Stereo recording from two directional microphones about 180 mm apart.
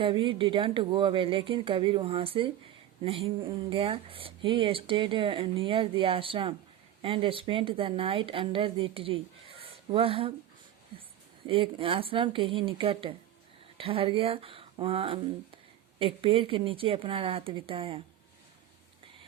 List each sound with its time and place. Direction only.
0.0 s a woman's voice: 30° right (ahead or behind)